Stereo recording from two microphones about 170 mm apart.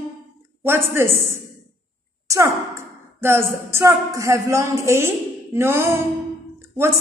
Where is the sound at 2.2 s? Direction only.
15° right (ahead or behind).